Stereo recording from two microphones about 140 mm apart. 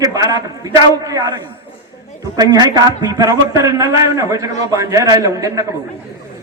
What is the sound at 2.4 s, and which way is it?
A man's voice, 30° right (ahead or behind).